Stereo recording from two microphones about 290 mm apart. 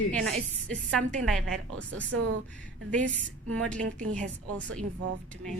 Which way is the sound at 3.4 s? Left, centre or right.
Right.